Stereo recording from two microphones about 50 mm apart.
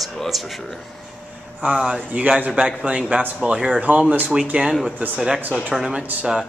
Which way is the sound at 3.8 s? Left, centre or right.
Right.